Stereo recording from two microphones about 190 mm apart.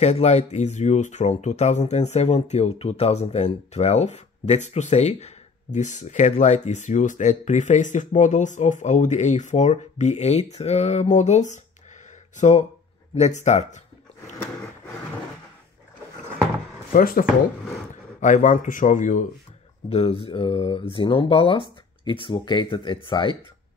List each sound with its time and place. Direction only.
0.0 s speech: 35° left (ahead or behind)
16.9 s speech: 45° left (ahead or behind); by 23.3 s 25° left (ahead or behind)